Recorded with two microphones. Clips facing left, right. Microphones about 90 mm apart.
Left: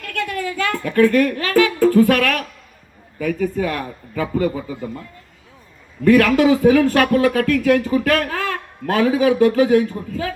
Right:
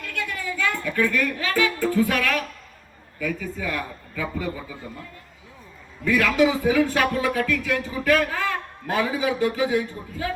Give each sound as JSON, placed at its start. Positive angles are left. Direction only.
{"t": 0.0, "sound": "music", "side_deg": 60}
{"t": 3.2, "sound": "a man's voice", "side_deg": 55}
{"t": 6.1, "sound": "speech", "side_deg": 65}